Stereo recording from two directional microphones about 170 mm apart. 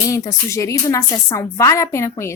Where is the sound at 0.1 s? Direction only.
20° left (ahead or behind).